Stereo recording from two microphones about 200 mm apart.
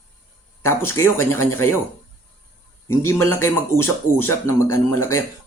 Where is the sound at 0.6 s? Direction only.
15° left (ahead or behind).